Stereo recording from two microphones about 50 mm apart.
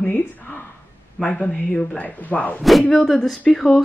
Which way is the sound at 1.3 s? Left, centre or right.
Left.